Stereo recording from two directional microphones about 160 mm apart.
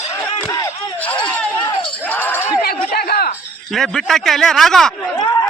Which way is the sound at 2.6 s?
75° left (ahead or behind).